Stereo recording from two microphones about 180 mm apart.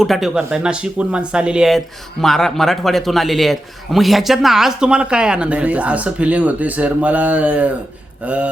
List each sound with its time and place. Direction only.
0.0 s a man's voice: centre (ahead or behind)